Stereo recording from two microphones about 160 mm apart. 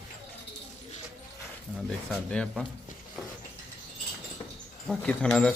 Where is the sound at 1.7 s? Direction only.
5° left (ahead or behind).